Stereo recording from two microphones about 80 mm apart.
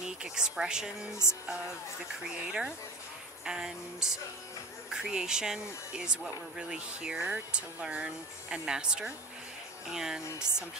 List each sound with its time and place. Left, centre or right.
0.0 s a sound: centre
1.2 s music: left
2.2 s speech: centre